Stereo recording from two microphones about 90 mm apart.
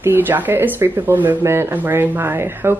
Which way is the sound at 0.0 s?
25° right (ahead or behind).